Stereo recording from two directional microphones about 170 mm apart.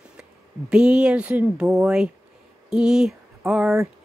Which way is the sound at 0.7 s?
5° right (ahead or behind).